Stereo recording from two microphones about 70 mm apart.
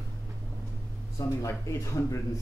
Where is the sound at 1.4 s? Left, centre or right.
Left.